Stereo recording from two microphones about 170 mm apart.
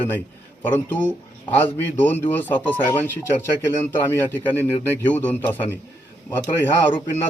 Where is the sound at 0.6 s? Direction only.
10° left (ahead or behind).